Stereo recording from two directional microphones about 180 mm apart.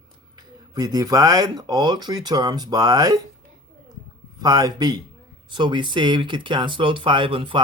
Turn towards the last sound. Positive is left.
turn(degrees=-30)  # may be behind; listen again after turning